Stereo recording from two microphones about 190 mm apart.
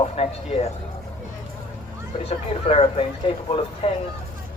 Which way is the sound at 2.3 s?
35° left (ahead or behind).